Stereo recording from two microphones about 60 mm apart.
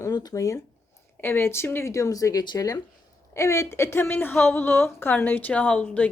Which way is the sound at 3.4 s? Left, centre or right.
Left.